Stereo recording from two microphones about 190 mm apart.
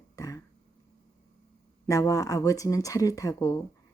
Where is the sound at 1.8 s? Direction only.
15° left (ahead or behind).